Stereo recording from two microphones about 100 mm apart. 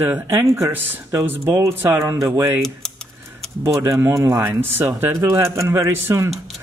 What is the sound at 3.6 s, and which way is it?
Speech, 30° right (ahead or behind).